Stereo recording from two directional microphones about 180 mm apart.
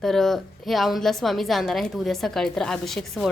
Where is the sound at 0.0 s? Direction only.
Centre (ahead or behind).